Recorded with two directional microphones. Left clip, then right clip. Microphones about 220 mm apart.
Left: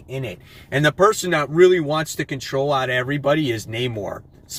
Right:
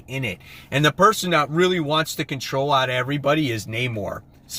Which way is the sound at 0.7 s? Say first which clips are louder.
Left 1 dB; 15° right (ahead or behind).